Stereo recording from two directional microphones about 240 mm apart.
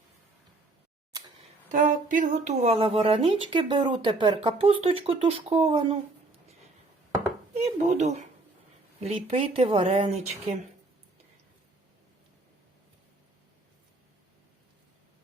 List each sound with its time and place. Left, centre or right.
1.7 s speech: right
7.5 s speech: right